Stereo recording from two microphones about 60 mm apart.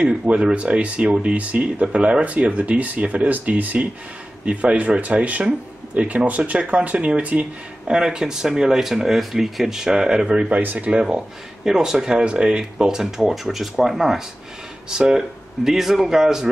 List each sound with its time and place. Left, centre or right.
0.0 s speech: centre
7.9 s speech: centre